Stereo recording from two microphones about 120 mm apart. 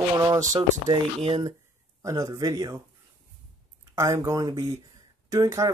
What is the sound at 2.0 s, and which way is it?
Speech, 25° right (ahead or behind).